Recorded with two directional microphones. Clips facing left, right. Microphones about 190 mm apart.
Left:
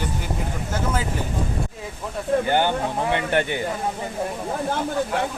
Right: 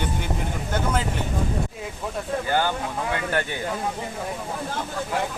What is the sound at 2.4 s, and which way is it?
Speech, 20° left (ahead or behind).